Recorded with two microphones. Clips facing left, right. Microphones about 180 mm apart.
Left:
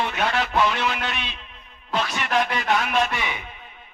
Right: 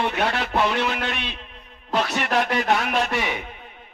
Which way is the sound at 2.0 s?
65° right (ahead or behind).